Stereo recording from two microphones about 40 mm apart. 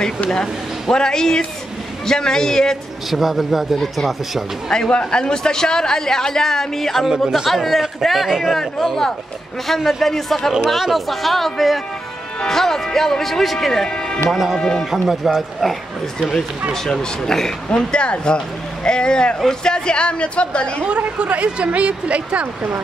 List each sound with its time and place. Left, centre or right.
0.3 s a man's voice: centre
3.1 s speech: centre
4.6 s a man's voice: left; by 8.3 s centre
8.3 s speech: centre
8.5 s a man's voice: centre
13.8 s speech: centre
14.3 s speech: centre
16.7 s a man's voice: centre
17.6 s a woman's voice: left
21.2 s speech: right